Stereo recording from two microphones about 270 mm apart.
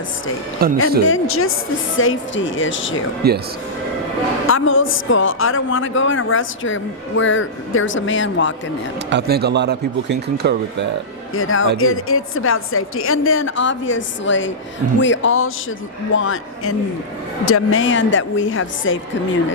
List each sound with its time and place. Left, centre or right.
0.6 s speech: right
1.0 s a woman's voice: left
3.2 s speech: right
4.4 s a woman's voice: left
9.0 s speech: right
11.3 s a woman's voice: left